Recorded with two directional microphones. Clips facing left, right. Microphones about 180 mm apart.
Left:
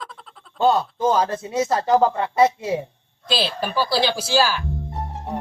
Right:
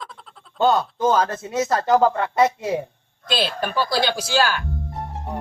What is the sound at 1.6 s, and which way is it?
Speech, 30° left (ahead or behind).